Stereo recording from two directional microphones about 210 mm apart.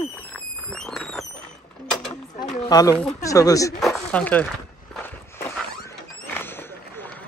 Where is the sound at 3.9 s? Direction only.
5° left (ahead or behind).